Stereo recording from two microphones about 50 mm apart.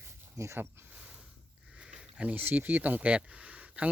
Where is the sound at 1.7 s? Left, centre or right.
Right.